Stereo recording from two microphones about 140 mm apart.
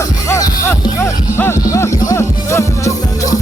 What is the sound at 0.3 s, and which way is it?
Music, 25° left (ahead or behind).